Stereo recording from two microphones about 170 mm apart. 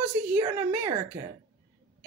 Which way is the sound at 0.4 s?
15° right (ahead or behind).